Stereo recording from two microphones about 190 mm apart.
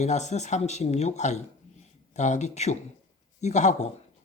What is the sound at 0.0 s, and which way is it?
Speech, 35° left (ahead or behind).